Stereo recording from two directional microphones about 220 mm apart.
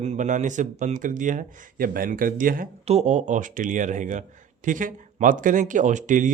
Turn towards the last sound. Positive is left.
turn(degrees=-35)  # may be behind; listen again after turning